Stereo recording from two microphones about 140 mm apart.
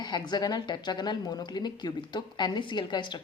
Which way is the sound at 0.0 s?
30° left (ahead or behind).